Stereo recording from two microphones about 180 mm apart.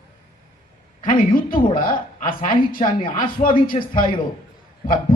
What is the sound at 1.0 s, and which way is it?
A woman's voice, 50° left (ahead or behind).